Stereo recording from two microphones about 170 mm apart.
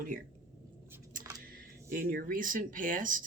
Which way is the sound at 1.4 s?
55° right (ahead or behind).